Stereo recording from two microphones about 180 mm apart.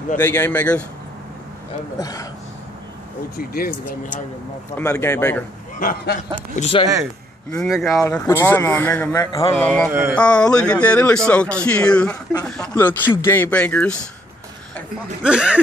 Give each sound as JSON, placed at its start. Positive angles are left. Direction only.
{"t": 0.2, "sound": "speech", "side_deg": 10}
{"t": 2.0, "sound": "speech", "side_deg": 20}
{"t": 3.3, "sound": "speech", "side_deg": 55}
{"t": 3.8, "sound": "speech", "side_deg": 45}
{"t": 4.7, "sound": "speech", "side_deg": 10}
{"t": 5.8, "sound": "speech", "side_deg": 50}
{"t": 6.6, "sound": "speech", "side_deg": 30}
{"t": 7.5, "sound": "speech", "side_deg": 0}
{"t": 7.9, "sound": "speech", "side_deg": 15}
{"t": 9.1, "sound": "speech", "side_deg": 20}
{"t": 9.5, "sound": "speech", "side_deg": 10}
{"t": 9.8, "sound": "a sound", "side_deg": -15}
{"t": 10.1, "sound": "speech", "side_deg": 5}
{"t": 15.2, "sound": "speech", "side_deg": -5}